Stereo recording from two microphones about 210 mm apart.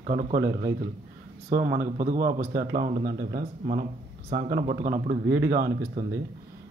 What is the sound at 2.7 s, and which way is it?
Speech, 45° right (ahead or behind).